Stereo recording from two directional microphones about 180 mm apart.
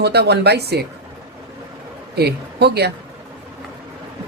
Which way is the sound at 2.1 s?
65° right (ahead or behind).